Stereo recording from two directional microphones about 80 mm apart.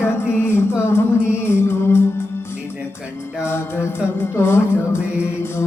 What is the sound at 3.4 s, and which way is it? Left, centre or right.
Music, left.